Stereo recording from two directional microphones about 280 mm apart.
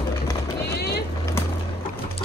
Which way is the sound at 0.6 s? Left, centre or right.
Left.